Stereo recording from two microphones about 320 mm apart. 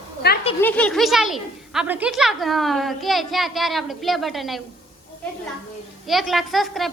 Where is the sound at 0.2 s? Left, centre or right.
Left.